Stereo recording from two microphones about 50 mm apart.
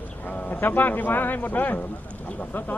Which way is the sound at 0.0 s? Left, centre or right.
Left.